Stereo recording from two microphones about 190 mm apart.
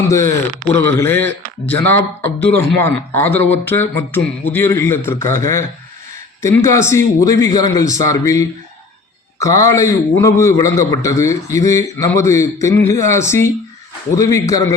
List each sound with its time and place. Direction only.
0.1 s a man's voice: 15° left (ahead or behind)